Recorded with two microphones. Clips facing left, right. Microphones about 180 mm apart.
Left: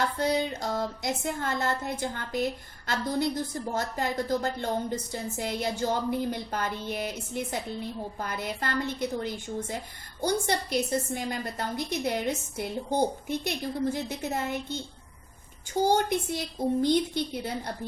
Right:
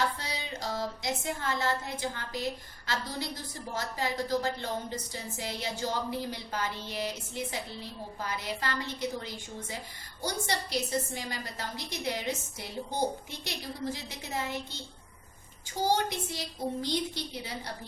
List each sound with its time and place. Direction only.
0.0 s music: 50° left (ahead or behind)
15.8 s music: 55° left (ahead or behind)